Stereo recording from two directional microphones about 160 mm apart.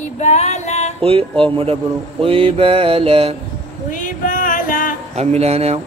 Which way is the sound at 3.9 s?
55° left (ahead or behind).